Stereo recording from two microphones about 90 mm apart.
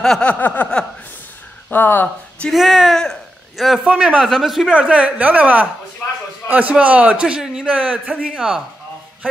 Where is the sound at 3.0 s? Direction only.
Centre (ahead or behind).